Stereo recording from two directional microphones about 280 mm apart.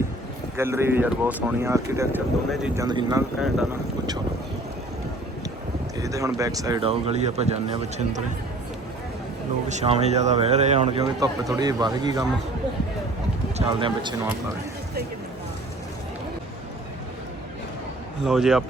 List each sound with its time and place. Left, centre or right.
0.5 s speech: centre
3.4 s speech: centre
6.0 s speech: centre
9.6 s speech: right
13.6 s speech: centre
18.2 s speech: centre